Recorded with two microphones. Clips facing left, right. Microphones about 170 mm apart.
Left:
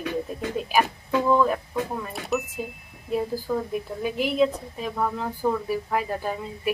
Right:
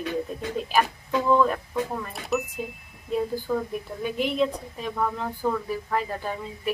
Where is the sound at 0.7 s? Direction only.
5° left (ahead or behind).